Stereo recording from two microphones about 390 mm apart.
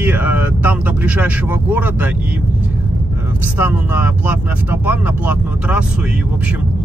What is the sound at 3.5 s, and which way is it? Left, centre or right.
Speech, centre.